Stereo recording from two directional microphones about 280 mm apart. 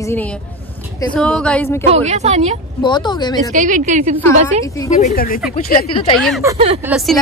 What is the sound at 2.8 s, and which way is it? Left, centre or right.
Speech, centre.